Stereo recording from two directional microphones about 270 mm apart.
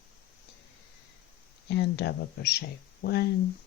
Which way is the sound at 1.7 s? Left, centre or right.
Left.